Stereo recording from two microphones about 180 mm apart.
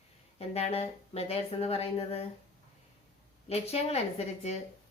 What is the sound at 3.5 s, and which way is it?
Speech, 35° left (ahead or behind).